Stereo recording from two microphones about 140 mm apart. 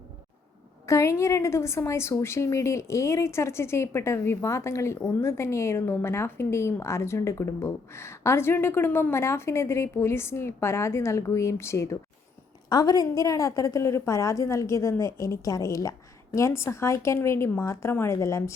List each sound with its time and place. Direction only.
0.9 s a woman's voice: 20° left (ahead or behind)